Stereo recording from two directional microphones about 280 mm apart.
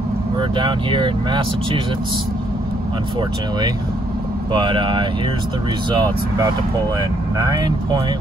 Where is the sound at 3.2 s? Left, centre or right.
Centre.